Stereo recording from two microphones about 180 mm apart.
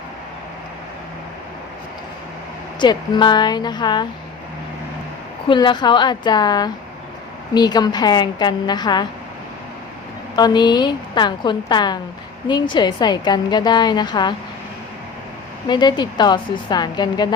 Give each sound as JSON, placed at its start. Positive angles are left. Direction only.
{"t": 2.8, "sound": "a woman's voice", "side_deg": 25}
{"t": 5.5, "sound": "a woman's voice", "side_deg": 25}
{"t": 10.3, "sound": "a woman's voice", "side_deg": 25}
{"t": 15.6, "sound": "a woman's voice", "side_deg": 25}